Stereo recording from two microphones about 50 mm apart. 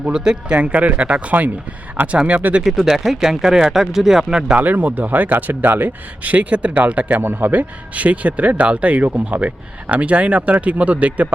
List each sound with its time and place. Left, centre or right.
0.0 s speech: centre
2.6 s speech: centre
4.5 s speech: right
7.2 s speech: right